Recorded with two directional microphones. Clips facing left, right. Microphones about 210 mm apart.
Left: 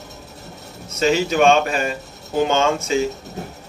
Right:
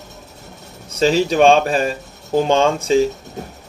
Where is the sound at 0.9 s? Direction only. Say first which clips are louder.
Right 3 dB; 30° right (ahead or behind).